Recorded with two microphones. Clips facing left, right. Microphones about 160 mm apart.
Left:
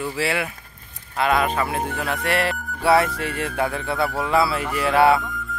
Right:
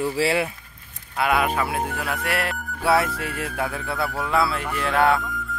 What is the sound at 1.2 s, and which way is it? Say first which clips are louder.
Speech: left 1 dB; 10° right (ahead or behind).